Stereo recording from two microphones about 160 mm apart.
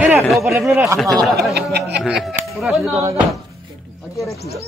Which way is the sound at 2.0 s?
5° right (ahead or behind).